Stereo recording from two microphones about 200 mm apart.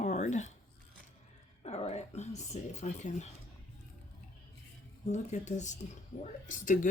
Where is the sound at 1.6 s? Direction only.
35° left (ahead or behind).